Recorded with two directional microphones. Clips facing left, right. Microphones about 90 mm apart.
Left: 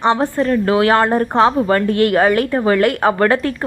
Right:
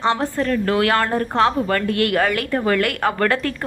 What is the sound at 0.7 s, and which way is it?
A woman's voice, 25° left (ahead or behind).